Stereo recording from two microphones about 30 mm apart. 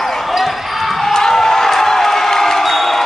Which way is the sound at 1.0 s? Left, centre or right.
Centre.